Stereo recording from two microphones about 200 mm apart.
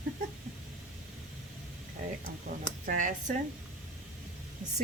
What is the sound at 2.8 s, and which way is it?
Speech, 40° right (ahead or behind).